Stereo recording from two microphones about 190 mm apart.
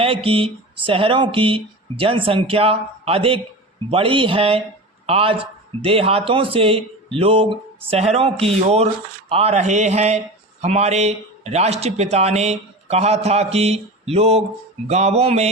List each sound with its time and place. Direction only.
0.0 s a man's voice: 30° right (ahead or behind)